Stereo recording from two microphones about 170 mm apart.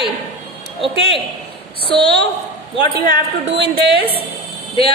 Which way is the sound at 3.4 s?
80° right.